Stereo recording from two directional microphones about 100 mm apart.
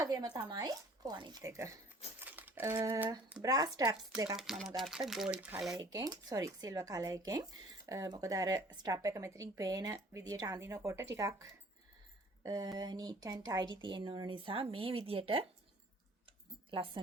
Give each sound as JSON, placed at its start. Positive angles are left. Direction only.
{"t": 0.0, "sound": "speech", "side_deg": -40}
{"t": 1.4, "sound": "speech", "side_deg": -30}
{"t": 2.1, "sound": "crumpling", "side_deg": -20}
{"t": 3.4, "sound": "speech", "side_deg": -35}
{"t": 4.4, "sound": "speech", "side_deg": -5}
{"t": 5.8, "sound": "speech", "side_deg": -40}
{"t": 16.7, "sound": "a woman's voice", "side_deg": -60}